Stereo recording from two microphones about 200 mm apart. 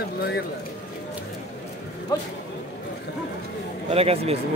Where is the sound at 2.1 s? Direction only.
15° left (ahead or behind).